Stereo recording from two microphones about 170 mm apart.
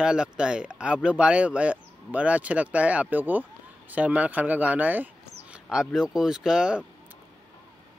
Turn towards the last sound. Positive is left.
turn(degrees=-5)  # may be behind; listen again after turning